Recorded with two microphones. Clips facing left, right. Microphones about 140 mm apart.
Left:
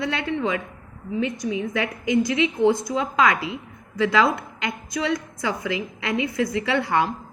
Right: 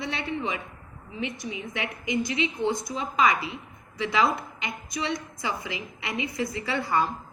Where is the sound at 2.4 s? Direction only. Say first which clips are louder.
Left 7 dB; 90° left.